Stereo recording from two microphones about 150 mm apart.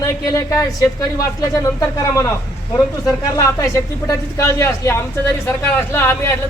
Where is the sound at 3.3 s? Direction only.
20° left (ahead or behind).